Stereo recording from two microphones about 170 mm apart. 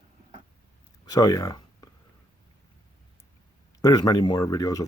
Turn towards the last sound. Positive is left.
turn(degrees=20)  # may be behind; listen again after turning